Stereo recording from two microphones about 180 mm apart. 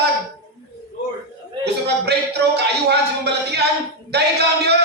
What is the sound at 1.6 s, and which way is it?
A man's voice, 65° right (ahead or behind).